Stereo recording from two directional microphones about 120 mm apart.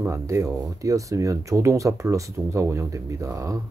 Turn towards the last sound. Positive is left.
turn(degrees=-25)  # may be behind; listen again after turning